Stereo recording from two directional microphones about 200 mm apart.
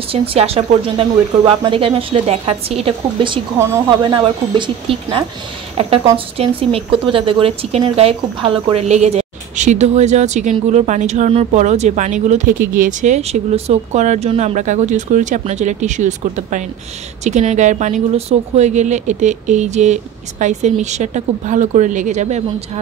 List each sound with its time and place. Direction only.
0.1 s speech: 30° right (ahead or behind)
3.5 s speech: 15° right (ahead or behind); by 22.4 s 35° right (ahead or behind)